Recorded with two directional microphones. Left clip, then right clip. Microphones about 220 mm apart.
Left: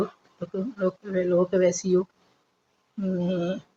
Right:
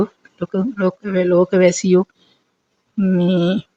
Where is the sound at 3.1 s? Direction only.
50° right (ahead or behind).